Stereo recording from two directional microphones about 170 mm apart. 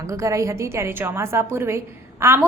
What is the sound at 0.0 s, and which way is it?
A woman's voice, 20° right (ahead or behind).